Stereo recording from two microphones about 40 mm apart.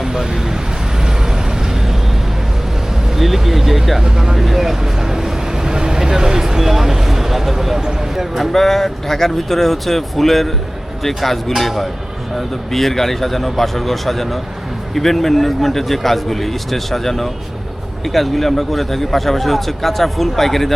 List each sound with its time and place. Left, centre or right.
0.0 s speech: centre
1.0 s vehicle: centre
3.2 s speech: centre
4.0 s speech: centre
8.5 s speech: centre